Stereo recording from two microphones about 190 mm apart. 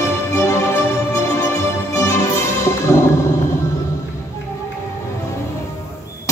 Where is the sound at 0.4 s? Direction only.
15° left (ahead or behind).